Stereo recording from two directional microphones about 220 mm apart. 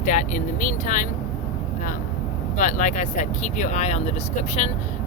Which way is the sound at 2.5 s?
35° left (ahead or behind).